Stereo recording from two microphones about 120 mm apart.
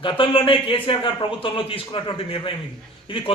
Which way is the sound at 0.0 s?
45° left (ahead or behind).